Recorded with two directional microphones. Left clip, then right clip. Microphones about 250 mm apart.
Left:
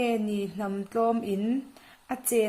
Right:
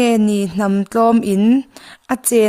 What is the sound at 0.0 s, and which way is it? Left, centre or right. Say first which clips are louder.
A woman's voice: right 12 dB; right.